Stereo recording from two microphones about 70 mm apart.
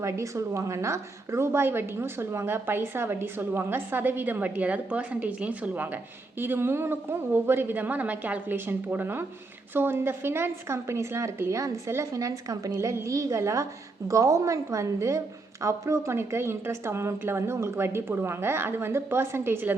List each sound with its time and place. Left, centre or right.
0.0 s a woman's voice: right
12.1 s a woman's voice: right